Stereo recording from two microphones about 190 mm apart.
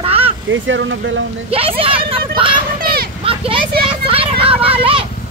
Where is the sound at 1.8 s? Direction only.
30° right (ahead or behind).